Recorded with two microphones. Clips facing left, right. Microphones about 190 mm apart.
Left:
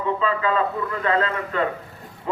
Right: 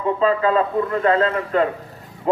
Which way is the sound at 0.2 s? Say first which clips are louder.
Right 8 dB; 40° right (ahead or behind).